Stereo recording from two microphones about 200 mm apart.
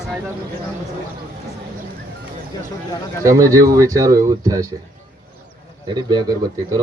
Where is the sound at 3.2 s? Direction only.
15° right (ahead or behind).